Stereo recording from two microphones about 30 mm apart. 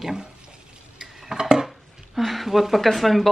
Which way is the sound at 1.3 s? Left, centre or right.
Right.